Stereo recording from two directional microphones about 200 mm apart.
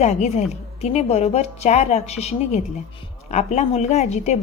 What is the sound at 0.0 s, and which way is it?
A woman's voice, 35° left (ahead or behind).